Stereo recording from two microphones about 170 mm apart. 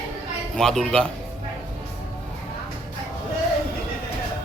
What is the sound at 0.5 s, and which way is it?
Speech, centre (ahead or behind).